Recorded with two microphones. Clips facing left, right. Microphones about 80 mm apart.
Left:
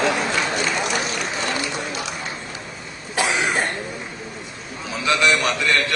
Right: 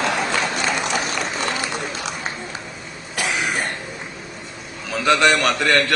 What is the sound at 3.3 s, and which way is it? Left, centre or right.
Cough, left.